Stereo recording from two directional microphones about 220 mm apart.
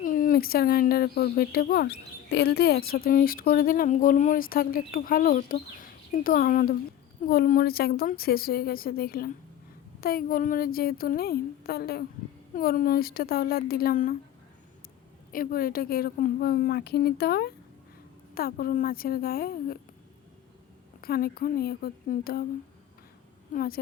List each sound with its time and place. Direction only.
0.0 s a woman's voice: 40° left (ahead or behind)
15.3 s a woman's voice: 40° left (ahead or behind)
21.0 s a woman's voice: 45° left (ahead or behind)
23.6 s speech: 40° left (ahead or behind)